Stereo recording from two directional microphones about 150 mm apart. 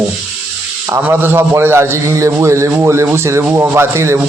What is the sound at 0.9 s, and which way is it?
A man's voice, 15° right (ahead or behind).